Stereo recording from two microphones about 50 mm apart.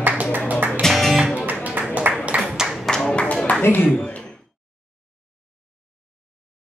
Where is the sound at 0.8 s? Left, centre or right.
Centre.